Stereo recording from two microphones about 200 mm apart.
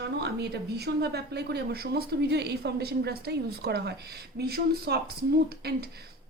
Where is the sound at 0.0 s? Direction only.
55° right (ahead or behind).